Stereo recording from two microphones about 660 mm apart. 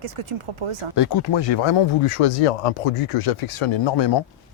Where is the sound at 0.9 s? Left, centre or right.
Left.